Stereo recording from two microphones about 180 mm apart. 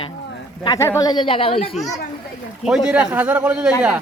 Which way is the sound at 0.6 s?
15° left (ahead or behind).